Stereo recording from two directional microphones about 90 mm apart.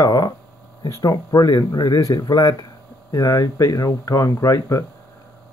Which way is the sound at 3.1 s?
30° left (ahead or behind).